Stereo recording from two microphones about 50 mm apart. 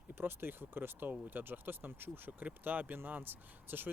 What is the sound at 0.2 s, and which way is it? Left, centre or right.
Speech, right.